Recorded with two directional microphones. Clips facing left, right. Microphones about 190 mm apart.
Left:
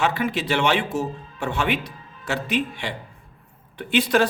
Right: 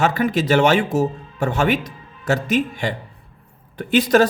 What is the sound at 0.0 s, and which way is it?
Speech, 45° right (ahead or behind).